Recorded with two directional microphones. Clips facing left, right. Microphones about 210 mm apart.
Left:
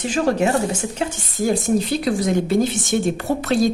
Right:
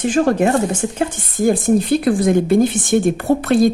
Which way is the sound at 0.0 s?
50° right (ahead or behind).